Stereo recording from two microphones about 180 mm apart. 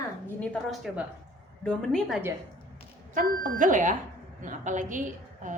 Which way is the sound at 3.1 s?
50° right (ahead or behind).